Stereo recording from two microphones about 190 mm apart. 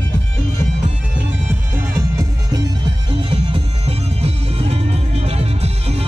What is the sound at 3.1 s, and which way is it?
Music, 30° right (ahead or behind).